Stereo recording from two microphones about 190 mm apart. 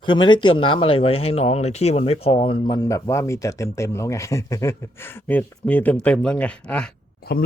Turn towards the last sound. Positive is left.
turn(degrees=55)  # may be behind; listen again after turning